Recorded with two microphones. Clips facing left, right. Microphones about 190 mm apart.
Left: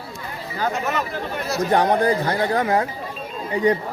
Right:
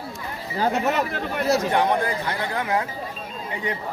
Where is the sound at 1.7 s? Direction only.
40° left (ahead or behind).